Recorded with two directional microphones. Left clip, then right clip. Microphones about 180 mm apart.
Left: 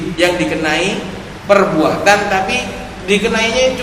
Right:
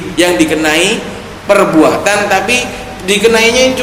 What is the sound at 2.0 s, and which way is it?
A man's voice, 45° right (ahead or behind).